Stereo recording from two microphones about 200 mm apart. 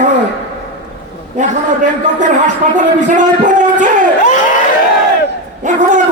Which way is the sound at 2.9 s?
40° right (ahead or behind).